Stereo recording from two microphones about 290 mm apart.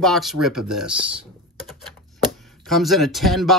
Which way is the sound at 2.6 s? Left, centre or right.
Centre.